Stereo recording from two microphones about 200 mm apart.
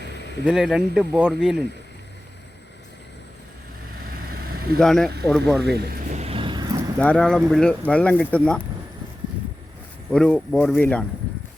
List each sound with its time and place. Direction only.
0.0 s a sound: 60° left (ahead or behind)
0.4 s speech: centre (ahead or behind)
4.3 s vehicle: 50° right (ahead or behind)
4.8 s speech: centre (ahead or behind)
5.6 s speech: 55° right (ahead or behind)
6.1 s vehicle: 30° right (ahead or behind)
7.0 s speech: 5° left (ahead or behind)
10.1 s speech: 5° left (ahead or behind)